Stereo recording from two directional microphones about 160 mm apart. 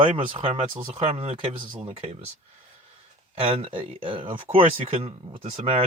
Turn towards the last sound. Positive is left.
turn(degrees=-40)  # may be behind; listen again after turning